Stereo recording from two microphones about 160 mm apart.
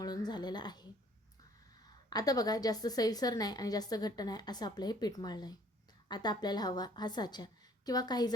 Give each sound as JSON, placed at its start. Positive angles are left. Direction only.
{"t": 0.0, "sound": "speech", "side_deg": 25}
{"t": 2.0, "sound": "a woman's voice", "side_deg": 25}